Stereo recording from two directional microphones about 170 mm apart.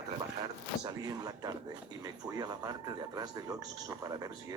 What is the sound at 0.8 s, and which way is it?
Speech, 25° right (ahead or behind).